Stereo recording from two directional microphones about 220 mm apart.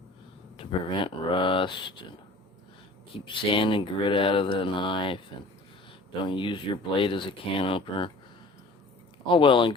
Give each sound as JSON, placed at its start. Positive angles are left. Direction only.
{"t": 0.5, "sound": "speech", "side_deg": 25}
{"t": 3.2, "sound": "speech", "side_deg": 25}
{"t": 6.2, "sound": "speech", "side_deg": 20}
{"t": 9.3, "sound": "speech", "side_deg": 20}